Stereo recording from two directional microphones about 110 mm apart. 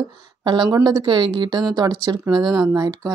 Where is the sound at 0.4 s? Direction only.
40° right (ahead or behind).